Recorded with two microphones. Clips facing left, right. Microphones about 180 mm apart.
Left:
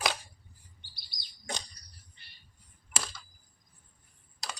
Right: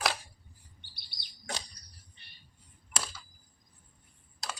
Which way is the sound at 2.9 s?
5° right (ahead or behind).